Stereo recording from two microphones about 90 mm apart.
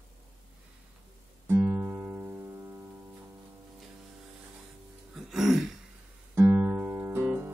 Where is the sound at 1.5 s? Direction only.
25° right (ahead or behind).